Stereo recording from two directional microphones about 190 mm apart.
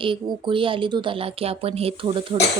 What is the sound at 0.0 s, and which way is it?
Speech, 25° right (ahead or behind).